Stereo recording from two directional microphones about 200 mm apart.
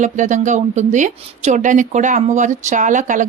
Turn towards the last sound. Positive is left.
turn(degrees=-40)  # may be behind; listen again after turning